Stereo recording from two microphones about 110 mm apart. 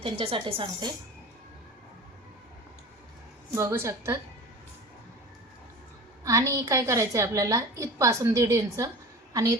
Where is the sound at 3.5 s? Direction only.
25° right (ahead or behind).